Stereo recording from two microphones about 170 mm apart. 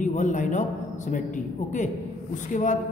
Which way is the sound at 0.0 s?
45° left (ahead or behind).